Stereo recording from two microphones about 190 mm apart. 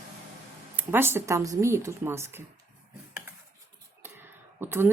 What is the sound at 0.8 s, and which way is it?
Speech, 10° right (ahead or behind).